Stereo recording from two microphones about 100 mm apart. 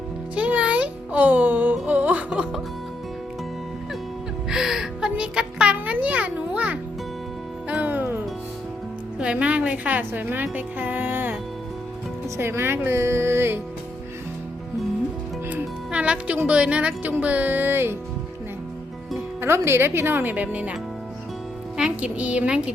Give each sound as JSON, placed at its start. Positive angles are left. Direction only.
{"t": 0.3, "sound": "music", "side_deg": -10}
{"t": 4.4, "sound": "music", "side_deg": -5}
{"t": 9.1, "sound": "a woman's voice", "side_deg": -10}
{"t": 12.4, "sound": "speech", "side_deg": -25}
{"t": 15.4, "sound": "music", "side_deg": -15}
{"t": 16.5, "sound": "speech", "side_deg": -10}
{"t": 19.4, "sound": "speech", "side_deg": -25}
{"t": 21.8, "sound": "speech", "side_deg": -10}